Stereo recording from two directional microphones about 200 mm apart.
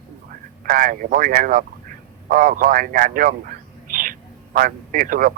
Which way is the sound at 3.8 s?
45° right (ahead or behind).